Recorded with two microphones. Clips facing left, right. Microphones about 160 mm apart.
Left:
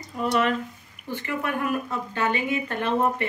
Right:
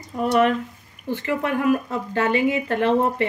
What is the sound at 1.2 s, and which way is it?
A woman's voice, 90° right.